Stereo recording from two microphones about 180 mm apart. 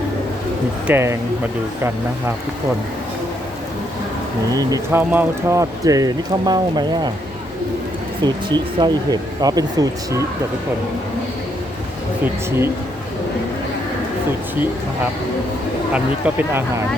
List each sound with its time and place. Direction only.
0.9 s speech: 15° right (ahead or behind)
4.5 s speech: 15° right (ahead or behind)
8.2 s speech: 25° right (ahead or behind)
15.9 s speech: 10° right (ahead or behind)